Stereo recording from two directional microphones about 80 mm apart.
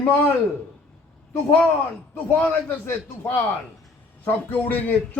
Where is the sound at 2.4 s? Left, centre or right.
Left.